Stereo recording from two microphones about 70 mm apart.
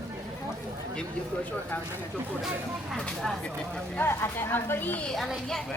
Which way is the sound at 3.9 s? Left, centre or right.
Left.